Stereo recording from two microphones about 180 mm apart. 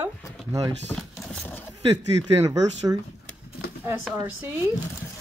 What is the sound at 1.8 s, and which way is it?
Speech, 20° right (ahead or behind).